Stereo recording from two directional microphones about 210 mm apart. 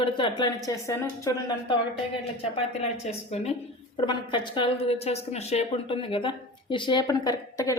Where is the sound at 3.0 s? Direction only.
30° left (ahead or behind).